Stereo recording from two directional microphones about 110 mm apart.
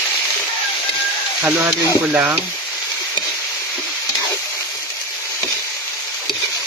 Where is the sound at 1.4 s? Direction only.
20° right (ahead or behind).